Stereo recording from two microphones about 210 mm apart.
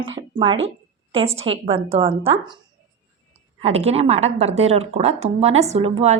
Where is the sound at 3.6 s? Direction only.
30° right (ahead or behind).